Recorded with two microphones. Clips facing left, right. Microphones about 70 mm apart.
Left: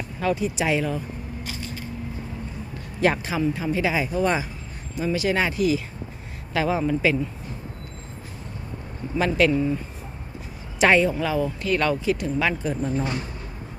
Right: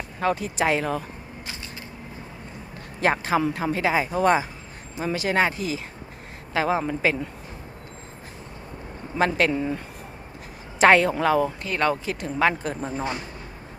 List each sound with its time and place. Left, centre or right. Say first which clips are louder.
0.2 s speech: even; right
3.0 s speech: even; right
9.1 s speech: left 1 dB; right
11.6 s speech: left 2 dB; right
12.8 s speech: left 2 dB; right